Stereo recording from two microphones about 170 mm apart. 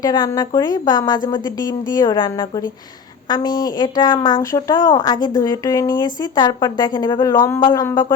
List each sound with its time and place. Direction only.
0.0 s speech: 25° left (ahead or behind)